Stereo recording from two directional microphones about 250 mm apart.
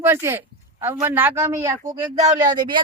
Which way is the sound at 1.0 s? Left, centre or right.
Centre.